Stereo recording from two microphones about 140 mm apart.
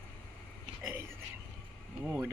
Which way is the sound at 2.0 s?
20° right (ahead or behind).